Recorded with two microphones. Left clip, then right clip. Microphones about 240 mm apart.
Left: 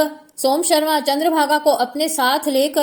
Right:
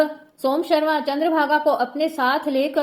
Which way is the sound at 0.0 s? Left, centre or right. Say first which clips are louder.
Left 2 dB; left.